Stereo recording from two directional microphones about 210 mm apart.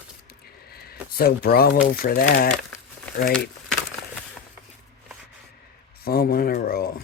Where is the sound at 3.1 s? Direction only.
5° left (ahead or behind).